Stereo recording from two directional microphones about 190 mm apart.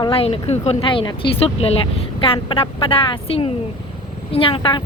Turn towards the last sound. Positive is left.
turn(degrees=25)  # may be behind; listen again after turning